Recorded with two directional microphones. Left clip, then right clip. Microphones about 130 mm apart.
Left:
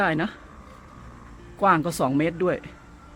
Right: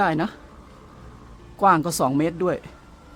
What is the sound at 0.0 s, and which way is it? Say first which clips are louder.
Speech: right 2 dB; 20° right (ahead or behind).